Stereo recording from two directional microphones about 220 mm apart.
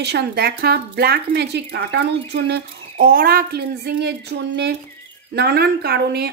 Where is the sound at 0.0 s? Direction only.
50° right (ahead or behind).